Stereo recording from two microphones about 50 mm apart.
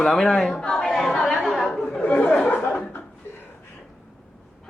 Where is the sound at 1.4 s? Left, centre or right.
Centre.